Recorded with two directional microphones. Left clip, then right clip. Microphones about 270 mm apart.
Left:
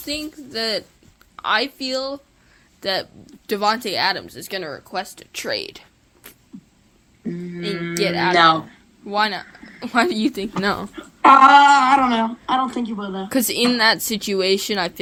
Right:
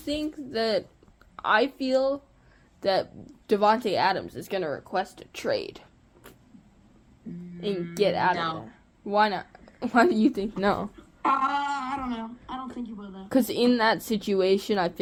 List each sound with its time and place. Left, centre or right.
0.0 s speech: left
7.3 s a sound: left
7.9 s speech: left
8.3 s speech: left
8.7 s speech: left
10.9 s speech: left
13.2 s speech: left